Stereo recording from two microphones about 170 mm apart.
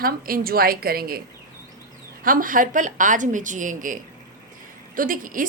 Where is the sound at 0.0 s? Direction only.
60° right (ahead or behind).